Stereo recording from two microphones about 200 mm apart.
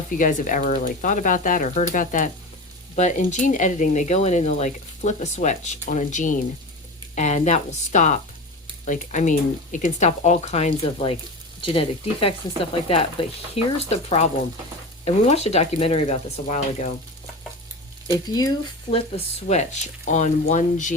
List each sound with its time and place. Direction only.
0.2 s speech: 40° left (ahead or behind)
18.1 s speech: 15° left (ahead or behind); by 20.9 s 40° left (ahead or behind)